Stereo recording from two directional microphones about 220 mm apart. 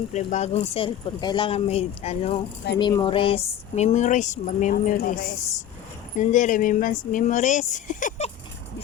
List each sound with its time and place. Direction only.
0.1 s speech: 30° left (ahead or behind)
6.1 s speech: 35° left (ahead or behind)